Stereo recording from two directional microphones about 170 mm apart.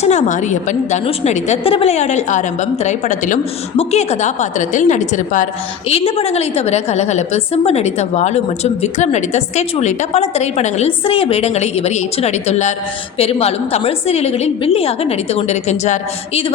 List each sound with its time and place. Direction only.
0.0 s a woman's voice: 45° left (ahead or behind)
5.9 s a woman's voice: 35° left (ahead or behind)